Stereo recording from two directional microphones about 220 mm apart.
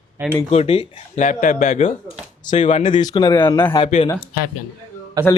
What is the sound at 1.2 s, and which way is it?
A man's voice, 35° left (ahead or behind).